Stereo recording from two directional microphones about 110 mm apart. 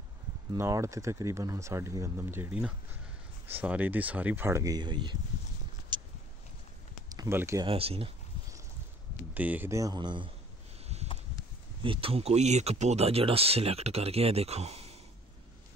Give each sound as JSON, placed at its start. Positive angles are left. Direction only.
{"t": 0.6, "sound": "speech", "side_deg": -25}
{"t": 4.5, "sound": "speech", "side_deg": -30}
{"t": 4.7, "sound": "a man's voice", "side_deg": -45}
{"t": 5.9, "sound": "a sound", "side_deg": -45}
{"t": 7.2, "sound": "speech", "side_deg": -25}
{"t": 7.6, "sound": "speech", "side_deg": -60}
{"t": 9.3, "sound": "speech", "side_deg": -15}
{"t": 9.7, "sound": "speech", "side_deg": -30}
{"t": 9.9, "sound": "a man's voice", "side_deg": -45}
{"t": 11.8, "sound": "speech", "side_deg": -55}